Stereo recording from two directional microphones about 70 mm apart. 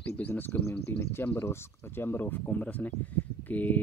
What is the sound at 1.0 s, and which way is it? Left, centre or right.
Speech, left.